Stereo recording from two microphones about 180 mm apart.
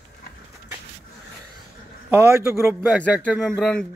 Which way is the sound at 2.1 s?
15° right (ahead or behind).